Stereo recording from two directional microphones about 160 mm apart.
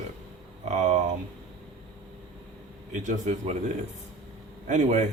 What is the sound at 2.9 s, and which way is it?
Speech, 50° right (ahead or behind).